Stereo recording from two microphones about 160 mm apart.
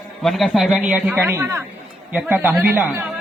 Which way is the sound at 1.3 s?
20° right (ahead or behind).